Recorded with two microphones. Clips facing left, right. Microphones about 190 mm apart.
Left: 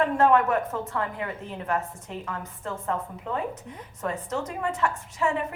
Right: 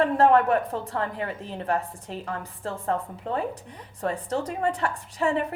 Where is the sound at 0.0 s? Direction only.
35° right (ahead or behind).